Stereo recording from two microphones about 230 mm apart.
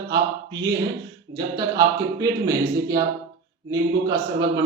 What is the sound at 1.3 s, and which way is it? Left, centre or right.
Speech, centre.